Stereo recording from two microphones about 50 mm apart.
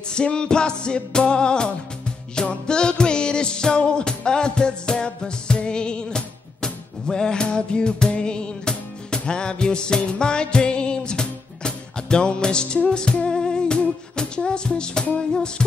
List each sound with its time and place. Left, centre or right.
0.1 s music: centre